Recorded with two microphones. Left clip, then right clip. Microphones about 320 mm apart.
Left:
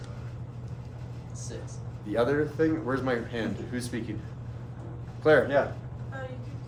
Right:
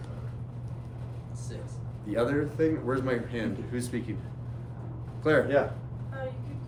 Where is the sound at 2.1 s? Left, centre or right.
Centre.